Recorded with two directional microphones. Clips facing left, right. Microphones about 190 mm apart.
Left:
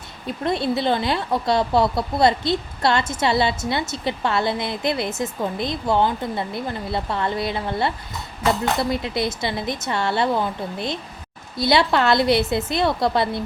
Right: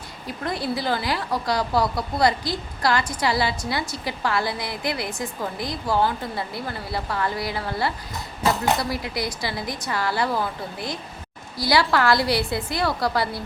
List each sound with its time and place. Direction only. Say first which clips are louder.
0.3 s speech: left 5 dB; 25° left (ahead or behind)